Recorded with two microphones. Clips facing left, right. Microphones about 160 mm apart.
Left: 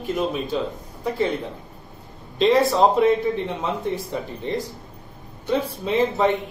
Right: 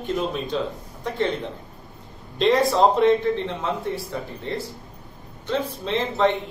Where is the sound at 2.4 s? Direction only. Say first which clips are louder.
Left 1 dB; centre (ahead or behind).